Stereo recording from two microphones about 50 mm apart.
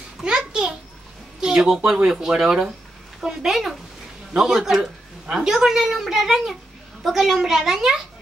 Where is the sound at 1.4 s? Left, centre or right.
Centre.